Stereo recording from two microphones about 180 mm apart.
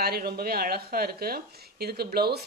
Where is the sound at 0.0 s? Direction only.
60° right (ahead or behind).